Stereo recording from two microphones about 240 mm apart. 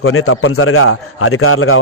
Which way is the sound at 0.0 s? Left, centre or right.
Left.